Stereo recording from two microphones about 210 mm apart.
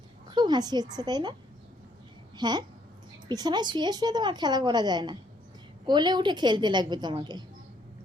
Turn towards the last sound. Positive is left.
turn(degrees=-20)  # may be behind; listen again after turning